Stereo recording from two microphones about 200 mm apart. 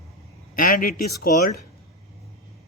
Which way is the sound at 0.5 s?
45° left (ahead or behind).